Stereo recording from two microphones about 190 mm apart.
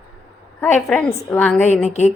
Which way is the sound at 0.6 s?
5° left (ahead or behind).